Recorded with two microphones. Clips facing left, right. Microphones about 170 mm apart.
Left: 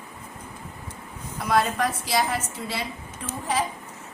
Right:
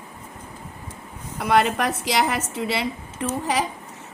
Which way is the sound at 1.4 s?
70° right (ahead or behind).